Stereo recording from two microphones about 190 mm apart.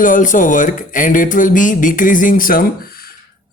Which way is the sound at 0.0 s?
45° left (ahead or behind).